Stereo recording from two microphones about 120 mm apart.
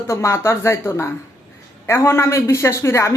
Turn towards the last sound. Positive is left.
turn(degrees=25)  # may be behind; listen again after turning